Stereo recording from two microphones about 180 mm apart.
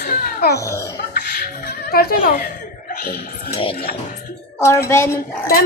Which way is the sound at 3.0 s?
60° left (ahead or behind).